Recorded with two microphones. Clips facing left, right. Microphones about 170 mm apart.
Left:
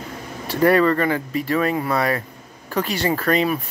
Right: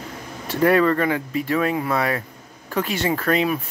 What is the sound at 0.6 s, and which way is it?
Speech, centre (ahead or behind).